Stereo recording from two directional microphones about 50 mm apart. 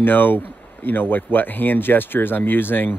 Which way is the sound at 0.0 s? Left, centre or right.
Left.